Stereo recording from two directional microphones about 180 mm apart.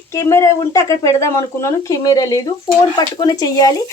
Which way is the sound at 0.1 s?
15° left (ahead or behind).